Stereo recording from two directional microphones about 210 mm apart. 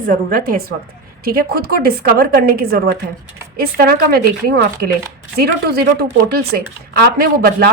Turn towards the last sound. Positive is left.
turn(degrees=-50)  # may be behind; listen again after turning